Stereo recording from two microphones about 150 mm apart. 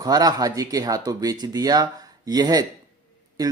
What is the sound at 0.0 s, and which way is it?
Speech, 25° right (ahead or behind).